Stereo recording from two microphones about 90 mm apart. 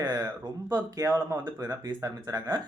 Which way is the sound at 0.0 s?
45° right (ahead or behind).